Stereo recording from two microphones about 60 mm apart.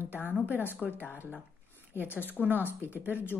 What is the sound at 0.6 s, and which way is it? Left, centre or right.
Speech, left.